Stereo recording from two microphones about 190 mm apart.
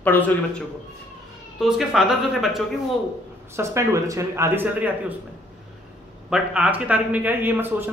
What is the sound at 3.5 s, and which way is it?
Speech, 15° right (ahead or behind).